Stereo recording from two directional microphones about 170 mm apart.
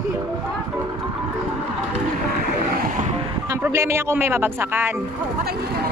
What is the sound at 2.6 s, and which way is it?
Vehicle, 50° right (ahead or behind).